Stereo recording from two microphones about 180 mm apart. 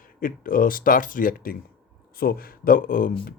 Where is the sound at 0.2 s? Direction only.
50° left (ahead or behind).